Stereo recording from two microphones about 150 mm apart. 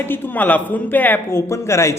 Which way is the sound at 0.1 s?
10° left (ahead or behind).